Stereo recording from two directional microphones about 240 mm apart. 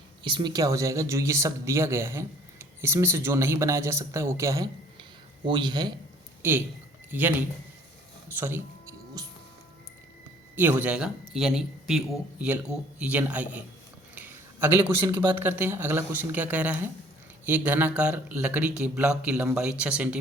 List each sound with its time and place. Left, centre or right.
0.2 s a man's voice: centre
8.4 s music: centre
10.5 s a man's voice: centre
15.4 s speech: centre